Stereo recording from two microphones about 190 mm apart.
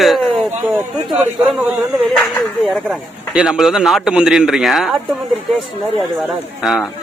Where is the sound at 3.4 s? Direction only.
5° right (ahead or behind).